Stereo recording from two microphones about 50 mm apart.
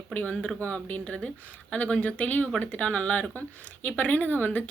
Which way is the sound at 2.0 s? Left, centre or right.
Left.